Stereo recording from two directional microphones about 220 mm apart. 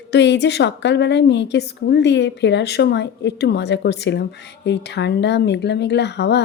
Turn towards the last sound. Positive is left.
turn(degrees=50)  # may be behind; listen again after turning